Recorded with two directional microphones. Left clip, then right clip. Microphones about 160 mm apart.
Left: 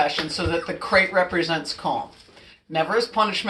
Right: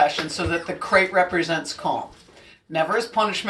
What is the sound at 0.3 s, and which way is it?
Speech, 5° right (ahead or behind).